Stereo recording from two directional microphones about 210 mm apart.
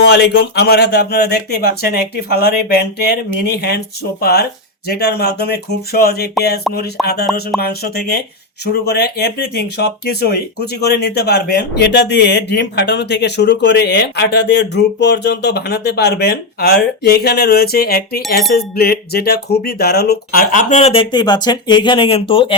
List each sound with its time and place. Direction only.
0.0 s speech: 50° left (ahead or behind)
6.7 s a sound: centre (ahead or behind)
7.0 s speech: 50° left (ahead or behind); by 22.5 s 25° left (ahead or behind)